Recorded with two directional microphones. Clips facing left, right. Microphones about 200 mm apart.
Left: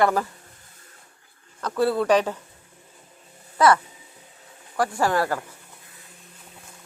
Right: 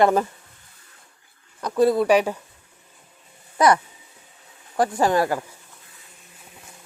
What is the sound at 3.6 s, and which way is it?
Speech, 15° right (ahead or behind).